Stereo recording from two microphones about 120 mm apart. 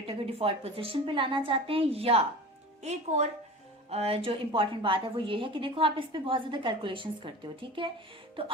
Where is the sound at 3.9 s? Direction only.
55° right (ahead or behind).